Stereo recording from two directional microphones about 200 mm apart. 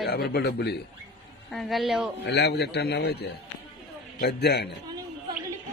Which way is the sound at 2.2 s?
55° left (ahead or behind).